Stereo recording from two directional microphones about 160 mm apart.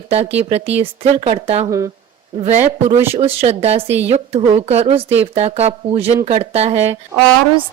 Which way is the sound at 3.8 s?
10° right (ahead or behind).